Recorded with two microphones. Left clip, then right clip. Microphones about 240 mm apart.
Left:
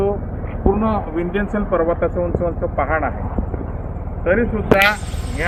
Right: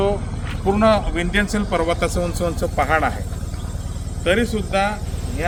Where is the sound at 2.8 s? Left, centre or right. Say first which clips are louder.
Right 2 dB; right.